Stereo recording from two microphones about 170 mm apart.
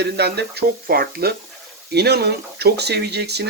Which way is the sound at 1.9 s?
75° right (ahead or behind).